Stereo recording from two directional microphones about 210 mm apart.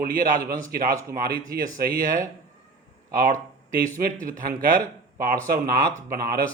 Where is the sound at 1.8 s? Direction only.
45° right (ahead or behind).